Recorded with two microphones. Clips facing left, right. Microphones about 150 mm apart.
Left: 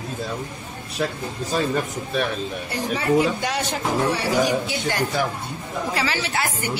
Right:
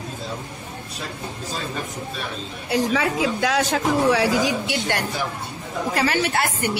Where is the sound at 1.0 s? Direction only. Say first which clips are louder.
Left 10 dB; 65° left (ahead or behind).